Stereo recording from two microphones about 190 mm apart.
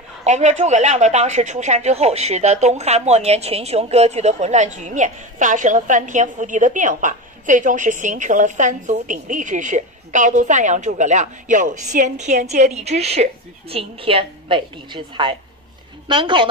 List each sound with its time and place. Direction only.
0.2 s a woman's voice: 35° right (ahead or behind)